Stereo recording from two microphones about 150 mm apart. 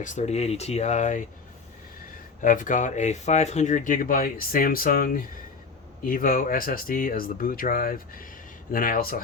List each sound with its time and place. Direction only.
0.0 s speech: 50° left (ahead or behind)
2.4 s speech: 60° left (ahead or behind)